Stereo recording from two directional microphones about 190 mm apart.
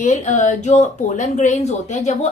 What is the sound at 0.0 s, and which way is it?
A woman's voice, 40° left (ahead or behind).